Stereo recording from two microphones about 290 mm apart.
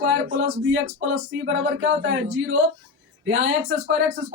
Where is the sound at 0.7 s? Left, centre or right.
Right.